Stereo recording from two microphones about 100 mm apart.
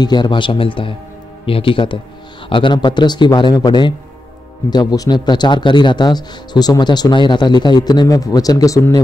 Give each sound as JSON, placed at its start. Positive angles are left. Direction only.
{"t": 0.0, "sound": "speech", "side_deg": 45}